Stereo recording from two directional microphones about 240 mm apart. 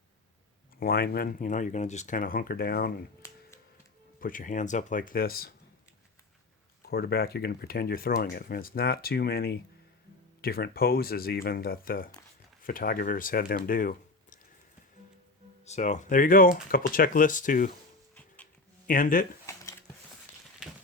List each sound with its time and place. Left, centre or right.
0.8 s speech: left
4.2 s speech: left
6.8 s speech: left
15.6 s speech: left
18.9 s speech: left
19.5 s a sound: centre